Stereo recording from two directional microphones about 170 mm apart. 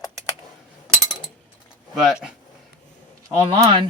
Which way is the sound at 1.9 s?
5° right (ahead or behind).